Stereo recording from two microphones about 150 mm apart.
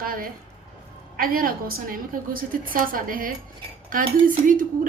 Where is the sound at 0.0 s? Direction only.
75° right (ahead or behind).